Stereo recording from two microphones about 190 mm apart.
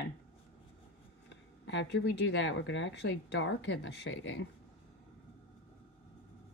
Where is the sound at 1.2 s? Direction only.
75° left (ahead or behind).